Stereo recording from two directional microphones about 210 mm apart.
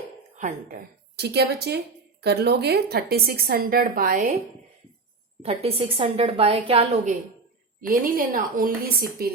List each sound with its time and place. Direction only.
0.3 s speech: 35° right (ahead or behind)
1.1 s a woman's voice: 50° right (ahead or behind)
5.4 s a woman's voice: 30° right (ahead or behind)
7.8 s a woman's voice: 40° right (ahead or behind)